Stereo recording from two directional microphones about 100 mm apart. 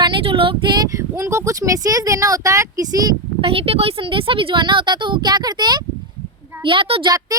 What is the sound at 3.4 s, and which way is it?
Speech, 70° right (ahead or behind).